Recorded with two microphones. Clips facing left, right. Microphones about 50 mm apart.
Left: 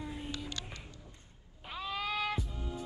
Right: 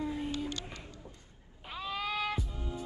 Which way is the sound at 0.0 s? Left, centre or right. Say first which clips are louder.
Right 7 dB; centre.